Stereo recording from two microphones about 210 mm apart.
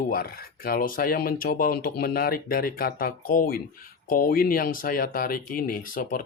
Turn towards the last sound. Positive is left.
turn(degrees=40)  # may be behind; listen again after turning